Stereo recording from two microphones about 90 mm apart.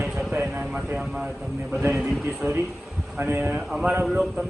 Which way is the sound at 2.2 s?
20° right (ahead or behind).